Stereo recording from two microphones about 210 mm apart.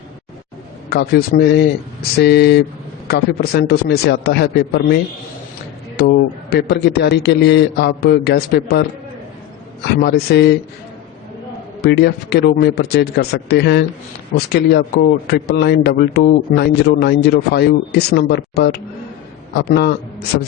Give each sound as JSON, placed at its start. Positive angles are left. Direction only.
{"t": 0.9, "sound": "a man's voice", "side_deg": 50}
{"t": 6.0, "sound": "a man's voice", "side_deg": 50}
{"t": 9.8, "sound": "a man's voice", "side_deg": 50}
{"t": 11.8, "sound": "a man's voice", "side_deg": 50}